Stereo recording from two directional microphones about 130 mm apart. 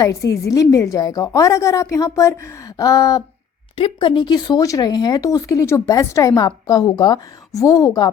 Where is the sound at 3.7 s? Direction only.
45° left (ahead or behind).